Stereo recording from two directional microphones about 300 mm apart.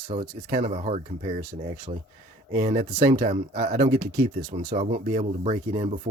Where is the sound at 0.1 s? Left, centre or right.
Right.